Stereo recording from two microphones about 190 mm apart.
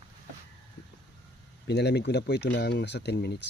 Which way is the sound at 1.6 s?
60° left (ahead or behind).